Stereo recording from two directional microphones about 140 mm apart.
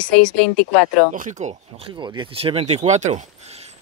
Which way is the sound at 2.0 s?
40° right (ahead or behind).